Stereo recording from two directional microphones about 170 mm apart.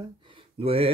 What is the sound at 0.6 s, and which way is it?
Speech, 35° right (ahead or behind).